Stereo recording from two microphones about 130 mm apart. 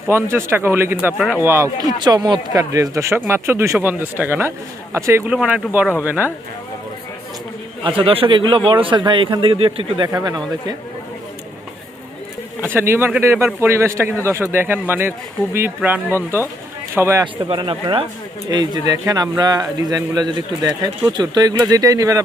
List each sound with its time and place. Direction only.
0.1 s speech: 20° right (ahead or behind)
2.0 s speech: 35° right (ahead or behind)
5.3 s speech: 5° right (ahead or behind)
8.0 s a man's voice: 45° right (ahead or behind)
10.0 s speech: 30° right (ahead or behind)
12.7 s speech: 15° right (ahead or behind)
17.5 s a man's voice: 40° right (ahead or behind)